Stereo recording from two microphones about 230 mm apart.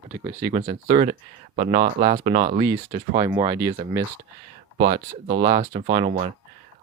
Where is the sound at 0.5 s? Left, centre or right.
Right.